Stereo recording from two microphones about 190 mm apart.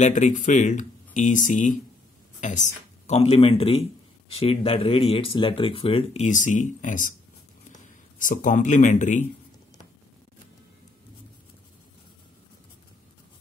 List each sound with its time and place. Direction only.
0.0 s speech: 40° left (ahead or behind)
8.2 s speech: 45° left (ahead or behind)